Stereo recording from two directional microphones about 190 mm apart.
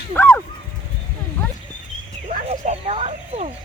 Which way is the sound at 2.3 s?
35° right (ahead or behind).